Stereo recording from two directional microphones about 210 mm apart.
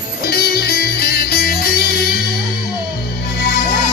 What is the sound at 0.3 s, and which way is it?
Music, 50° left (ahead or behind).